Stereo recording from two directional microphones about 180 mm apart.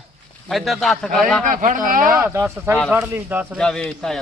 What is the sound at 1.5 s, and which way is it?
Speech, 45° right (ahead or behind).